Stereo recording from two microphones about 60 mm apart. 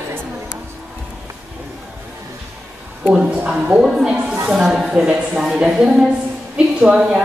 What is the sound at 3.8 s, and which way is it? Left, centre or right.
A woman's voice, centre.